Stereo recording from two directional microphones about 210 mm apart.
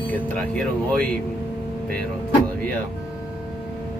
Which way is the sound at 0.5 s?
5° left (ahead or behind).